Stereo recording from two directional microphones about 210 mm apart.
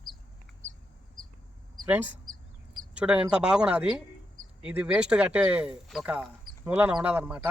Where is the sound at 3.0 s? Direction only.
5° right (ahead or behind).